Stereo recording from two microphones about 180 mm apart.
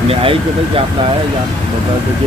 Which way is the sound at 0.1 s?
30° right (ahead or behind).